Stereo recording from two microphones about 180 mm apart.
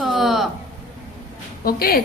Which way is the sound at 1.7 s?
55° left (ahead or behind).